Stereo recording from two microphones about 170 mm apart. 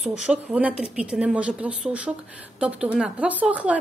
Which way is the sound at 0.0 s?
5° right (ahead or behind).